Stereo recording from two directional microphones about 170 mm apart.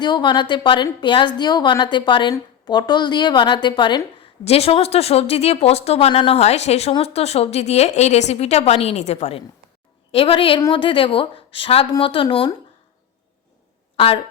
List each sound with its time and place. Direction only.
0.0 s a woman's voice: 25° left (ahead or behind)
13.9 s speech: 35° left (ahead or behind)